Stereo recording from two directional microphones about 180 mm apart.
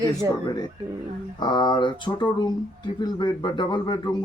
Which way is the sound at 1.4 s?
25° left (ahead or behind).